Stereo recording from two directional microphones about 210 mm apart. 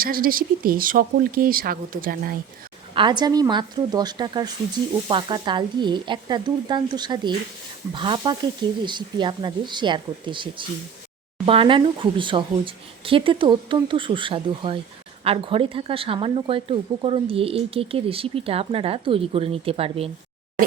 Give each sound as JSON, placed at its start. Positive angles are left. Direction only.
{"t": 0.0, "sound": "speech", "side_deg": -45}
{"t": 2.9, "sound": "speech", "side_deg": -20}